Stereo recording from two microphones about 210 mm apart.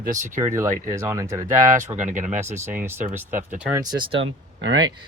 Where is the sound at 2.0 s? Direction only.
35° right (ahead or behind).